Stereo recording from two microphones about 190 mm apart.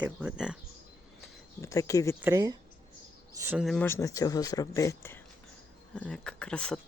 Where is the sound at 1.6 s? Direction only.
15° left (ahead or behind).